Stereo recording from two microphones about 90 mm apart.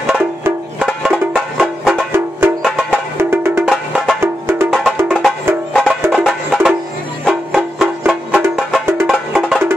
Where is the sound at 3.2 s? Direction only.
30° right (ahead or behind).